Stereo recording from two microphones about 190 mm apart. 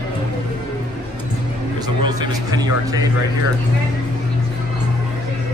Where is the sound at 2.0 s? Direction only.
20° right (ahead or behind).